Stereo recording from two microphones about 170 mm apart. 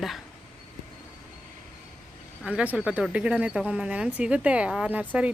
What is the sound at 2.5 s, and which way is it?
Speech, 5° right (ahead or behind).